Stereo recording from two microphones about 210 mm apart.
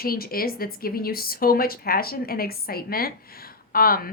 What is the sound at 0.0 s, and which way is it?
A woman's voice, 45° left (ahead or behind).